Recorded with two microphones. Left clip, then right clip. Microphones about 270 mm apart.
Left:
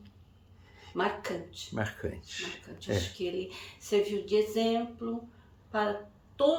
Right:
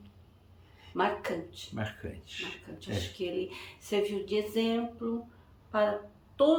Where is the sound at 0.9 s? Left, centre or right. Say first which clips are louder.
Right 2 dB; centre.